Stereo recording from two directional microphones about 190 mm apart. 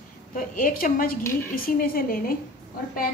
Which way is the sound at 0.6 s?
45° left (ahead or behind).